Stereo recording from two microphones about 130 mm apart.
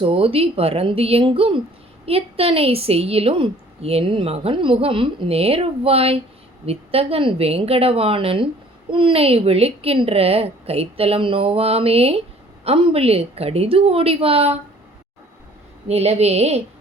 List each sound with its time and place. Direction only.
0.0 s a woman's voice: 45° right (ahead or behind)
15.9 s a woman's voice: 55° right (ahead or behind)